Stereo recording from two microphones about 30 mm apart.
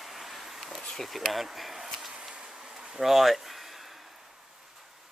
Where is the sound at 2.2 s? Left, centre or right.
Centre.